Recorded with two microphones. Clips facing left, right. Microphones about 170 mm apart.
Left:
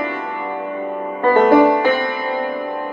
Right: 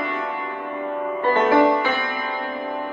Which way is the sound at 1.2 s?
50° left (ahead or behind).